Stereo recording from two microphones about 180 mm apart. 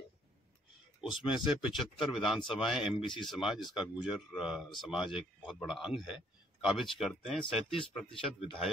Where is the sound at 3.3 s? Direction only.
Centre (ahead or behind).